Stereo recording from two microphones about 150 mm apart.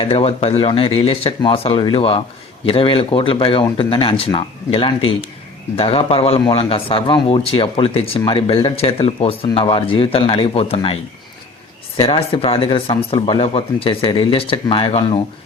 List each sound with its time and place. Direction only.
0.0 s speech: 40° left (ahead or behind)
11.9 s speech: 35° left (ahead or behind)